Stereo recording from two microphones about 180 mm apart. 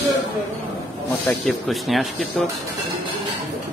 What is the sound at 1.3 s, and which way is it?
Speech, centre (ahead or behind).